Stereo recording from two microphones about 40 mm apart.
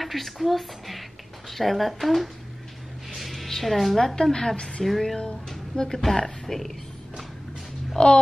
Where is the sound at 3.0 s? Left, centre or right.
Centre.